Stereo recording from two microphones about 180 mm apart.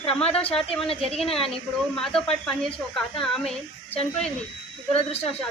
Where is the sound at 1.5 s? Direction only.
5° left (ahead or behind).